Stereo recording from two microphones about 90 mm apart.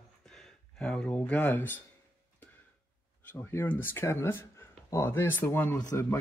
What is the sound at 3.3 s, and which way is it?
Speech, 25° left (ahead or behind).